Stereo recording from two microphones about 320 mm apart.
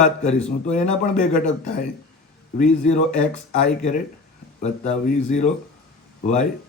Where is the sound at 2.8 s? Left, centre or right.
Left.